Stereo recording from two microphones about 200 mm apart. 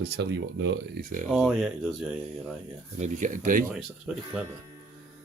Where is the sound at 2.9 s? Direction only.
35° right (ahead or behind).